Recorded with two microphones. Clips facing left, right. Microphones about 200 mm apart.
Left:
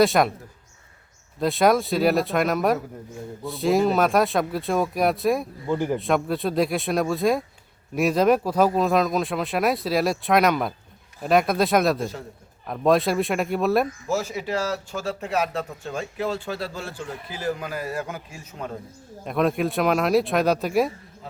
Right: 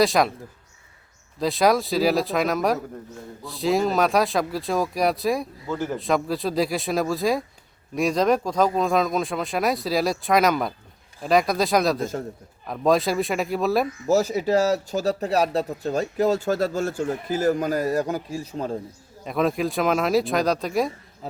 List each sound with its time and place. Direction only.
0.0 s speech: centre (ahead or behind)
1.4 s speech: centre (ahead or behind)
5.6 s speech: 15° left (ahead or behind)
6.0 s speech: centre (ahead or behind)
14.1 s a man's voice: 40° right (ahead or behind)
19.2 s speech: centre (ahead or behind)